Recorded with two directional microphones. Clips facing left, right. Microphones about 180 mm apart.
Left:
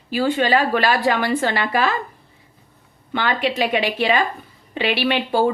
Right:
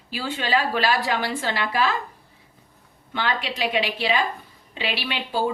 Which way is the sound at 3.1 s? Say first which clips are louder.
Left 6 dB; 55° left (ahead or behind).